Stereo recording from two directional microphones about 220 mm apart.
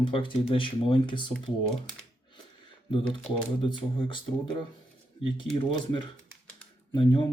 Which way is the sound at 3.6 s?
20° left (ahead or behind).